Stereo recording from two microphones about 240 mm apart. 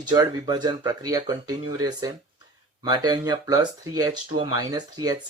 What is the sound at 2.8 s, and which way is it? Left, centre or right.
Speech, centre.